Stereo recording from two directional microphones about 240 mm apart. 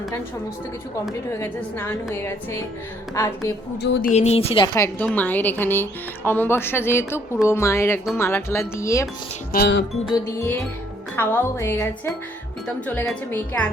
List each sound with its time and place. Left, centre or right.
1.3 s speech: centre
3.8 s a sound: left
4.1 s a woman's voice: left
9.5 s speech: left
10.2 s speech: centre